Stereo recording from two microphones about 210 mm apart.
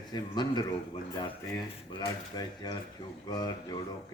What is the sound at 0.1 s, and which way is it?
Speech, 20° left (ahead or behind).